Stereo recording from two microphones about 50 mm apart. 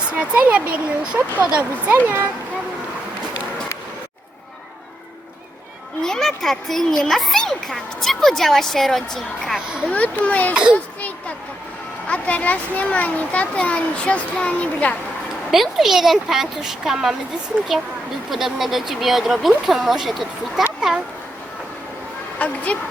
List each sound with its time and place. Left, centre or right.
0.1 s speech: right
1.9 s speech: right
6.0 s a child's voice: centre
9.9 s a child's voice: left
10.5 s speech: centre
12.0 s a child's voice: left
15.5 s speech: centre
18.3 s speech: centre
22.4 s a sound: left